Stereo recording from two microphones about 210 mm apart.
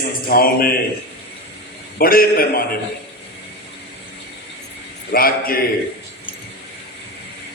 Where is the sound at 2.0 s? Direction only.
45° left (ahead or behind).